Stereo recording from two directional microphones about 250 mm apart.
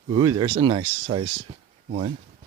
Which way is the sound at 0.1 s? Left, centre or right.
Centre.